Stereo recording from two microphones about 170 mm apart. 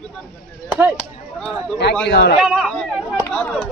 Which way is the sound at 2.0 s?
75° left (ahead or behind).